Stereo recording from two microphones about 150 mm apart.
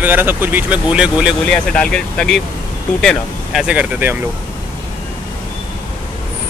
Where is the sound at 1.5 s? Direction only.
5° left (ahead or behind); by 4.1 s 10° right (ahead or behind).